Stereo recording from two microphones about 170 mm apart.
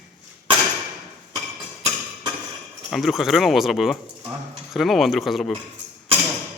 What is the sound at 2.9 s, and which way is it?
Speech, centre (ahead or behind).